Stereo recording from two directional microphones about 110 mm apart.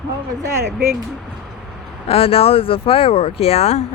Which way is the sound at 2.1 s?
60° left (ahead or behind).